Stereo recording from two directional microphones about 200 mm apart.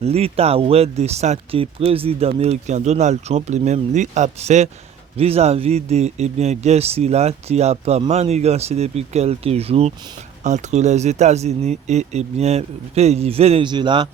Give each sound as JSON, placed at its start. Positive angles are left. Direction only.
{"t": 0.0, "sound": "speech", "side_deg": -30}